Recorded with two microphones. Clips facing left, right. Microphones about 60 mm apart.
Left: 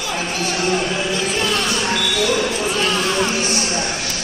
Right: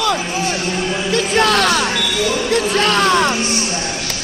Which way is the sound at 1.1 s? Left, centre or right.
Right.